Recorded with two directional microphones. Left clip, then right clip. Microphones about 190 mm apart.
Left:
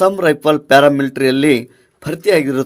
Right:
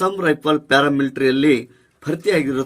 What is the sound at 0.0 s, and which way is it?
A man's voice, 40° left (ahead or behind).